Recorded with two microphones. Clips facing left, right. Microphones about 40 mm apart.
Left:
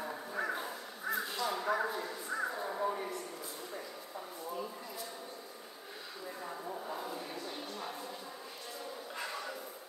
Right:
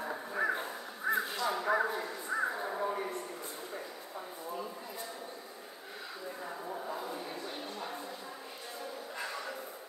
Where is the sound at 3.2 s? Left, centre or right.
Centre.